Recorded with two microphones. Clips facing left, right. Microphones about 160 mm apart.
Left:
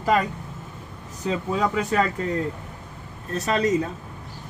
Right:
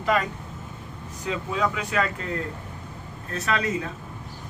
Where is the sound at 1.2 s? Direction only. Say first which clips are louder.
Left 3 dB; 40° left (ahead or behind).